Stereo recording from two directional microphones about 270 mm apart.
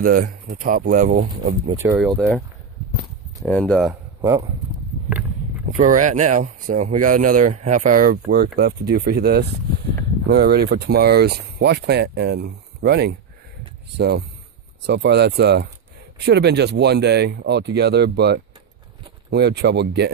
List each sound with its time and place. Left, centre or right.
0.0 s speech: right
1.7 s speech: centre
3.4 s speech: centre
4.2 s speech: centre
5.8 s speech: right